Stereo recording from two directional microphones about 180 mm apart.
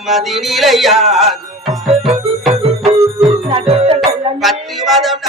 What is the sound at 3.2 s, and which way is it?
Music, 35° right (ahead or behind).